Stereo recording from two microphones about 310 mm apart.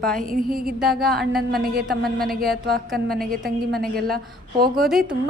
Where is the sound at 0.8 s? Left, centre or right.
Centre.